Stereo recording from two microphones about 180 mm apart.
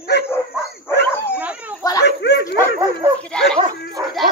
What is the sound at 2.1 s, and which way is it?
Bow-wow, 70° left (ahead or behind).